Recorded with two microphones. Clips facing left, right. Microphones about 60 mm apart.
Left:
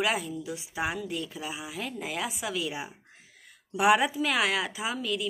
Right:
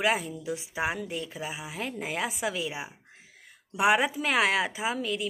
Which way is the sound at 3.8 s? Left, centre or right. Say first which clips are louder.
Left 1 dB; right.